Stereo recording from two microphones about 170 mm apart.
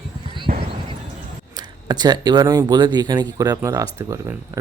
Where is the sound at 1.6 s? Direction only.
25° right (ahead or behind).